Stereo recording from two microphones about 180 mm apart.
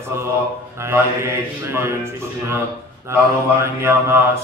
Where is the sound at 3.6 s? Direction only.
15° right (ahead or behind).